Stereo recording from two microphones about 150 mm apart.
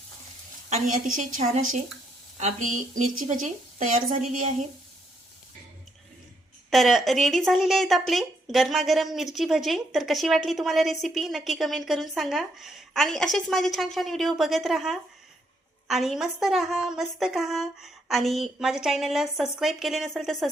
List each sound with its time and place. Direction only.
0.7 s a woman's voice: 60° right (ahead or behind)
6.7 s speech: centre (ahead or behind)